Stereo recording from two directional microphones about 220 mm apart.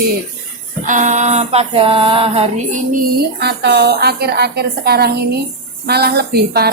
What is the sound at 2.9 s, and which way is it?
A woman's voice, 50° right (ahead or behind).